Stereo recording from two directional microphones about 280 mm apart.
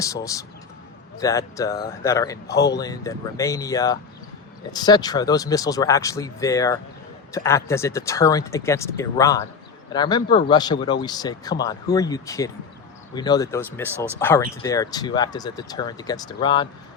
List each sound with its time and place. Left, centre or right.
0.0 s speech: centre
2.5 s speech: left
2.7 s speech: centre